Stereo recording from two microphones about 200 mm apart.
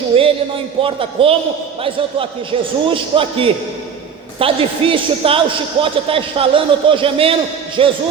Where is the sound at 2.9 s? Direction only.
25° right (ahead or behind).